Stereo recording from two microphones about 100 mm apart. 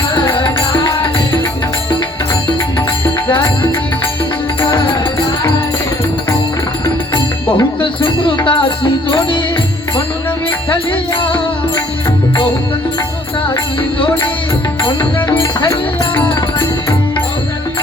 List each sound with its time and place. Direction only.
0.1 s music: 50° left (ahead or behind)
4.6 s music: 55° left (ahead or behind)
7.8 s music: 55° left (ahead or behind)
10.7 s music: 55° left (ahead or behind)
14.8 s music: 55° left (ahead or behind)